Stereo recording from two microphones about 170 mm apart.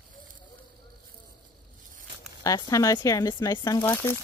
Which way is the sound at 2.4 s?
20° left (ahead or behind).